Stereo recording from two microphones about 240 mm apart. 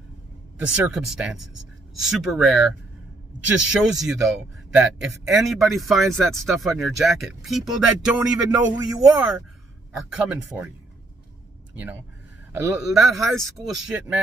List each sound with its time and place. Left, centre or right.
0.6 s a man's voice: centre
8.7 s speech: centre
9.9 s a man's voice: centre
11.7 s a man's voice: centre